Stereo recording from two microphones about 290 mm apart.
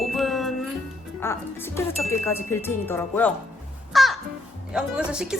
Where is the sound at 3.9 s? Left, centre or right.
Centre.